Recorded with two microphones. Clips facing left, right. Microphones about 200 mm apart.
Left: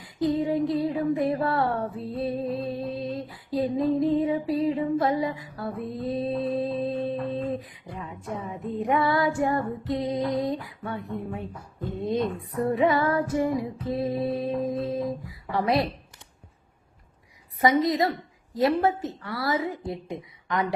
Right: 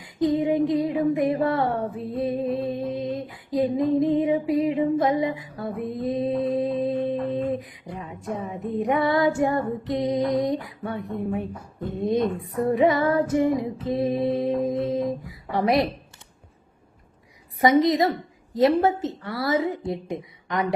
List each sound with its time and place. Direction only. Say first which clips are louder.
0.0 s female singing: right 3 dB; 20° right (ahead or behind)
8.4 s child singing: right 2 dB; 20° right (ahead or behind)
17.6 s child singing: right 3 dB; 20° right (ahead or behind)